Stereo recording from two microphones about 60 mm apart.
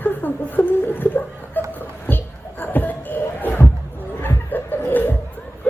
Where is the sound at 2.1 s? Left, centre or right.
Left.